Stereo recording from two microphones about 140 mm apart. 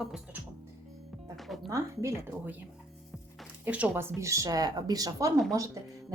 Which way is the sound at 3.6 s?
10° right (ahead or behind).